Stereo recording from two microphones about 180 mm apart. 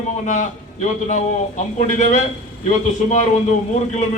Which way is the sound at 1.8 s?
40° left (ahead or behind).